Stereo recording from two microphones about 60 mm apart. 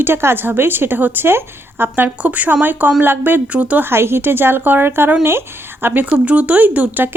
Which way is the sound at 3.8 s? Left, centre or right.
Right.